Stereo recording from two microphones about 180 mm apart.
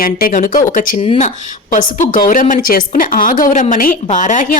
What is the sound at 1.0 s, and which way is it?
Speech, 30° left (ahead or behind).